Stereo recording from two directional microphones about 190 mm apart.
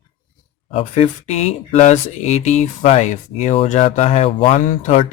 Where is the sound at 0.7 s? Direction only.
35° left (ahead or behind).